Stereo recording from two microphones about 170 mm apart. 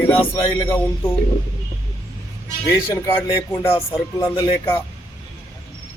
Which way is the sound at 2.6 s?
15° left (ahead or behind).